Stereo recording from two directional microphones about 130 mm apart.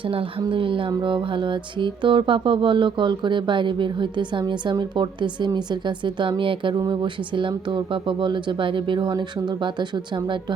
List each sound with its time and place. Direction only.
0.1 s speech: 40° right (ahead or behind)